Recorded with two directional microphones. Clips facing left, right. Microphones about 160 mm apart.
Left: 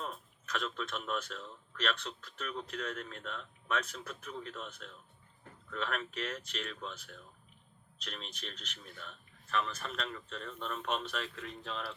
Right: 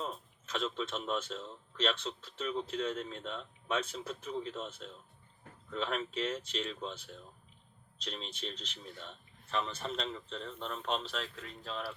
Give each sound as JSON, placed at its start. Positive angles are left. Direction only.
{"t": 0.0, "sound": "speech", "side_deg": -25}
{"t": 11.3, "sound": "speech", "side_deg": -5}